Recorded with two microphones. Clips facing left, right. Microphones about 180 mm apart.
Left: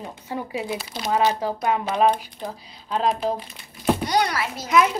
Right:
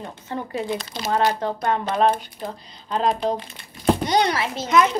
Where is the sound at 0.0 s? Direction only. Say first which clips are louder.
Even; 5° left (ahead or behind).